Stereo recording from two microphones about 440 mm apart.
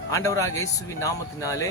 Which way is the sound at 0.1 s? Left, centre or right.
Centre.